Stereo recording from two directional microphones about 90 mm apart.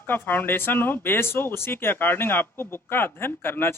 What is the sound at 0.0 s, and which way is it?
Speech, 20° left (ahead or behind).